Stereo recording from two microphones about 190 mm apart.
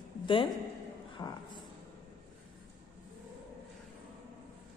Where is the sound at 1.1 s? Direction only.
25° left (ahead or behind).